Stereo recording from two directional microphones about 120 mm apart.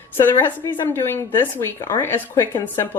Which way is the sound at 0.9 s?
20° left (ahead or behind).